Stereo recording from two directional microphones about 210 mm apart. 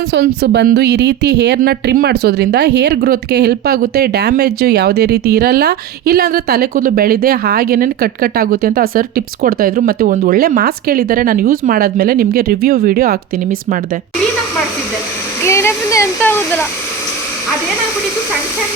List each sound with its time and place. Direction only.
0.1 s speech: 55° right (ahead or behind)
15.4 s speech: 15° left (ahead or behind)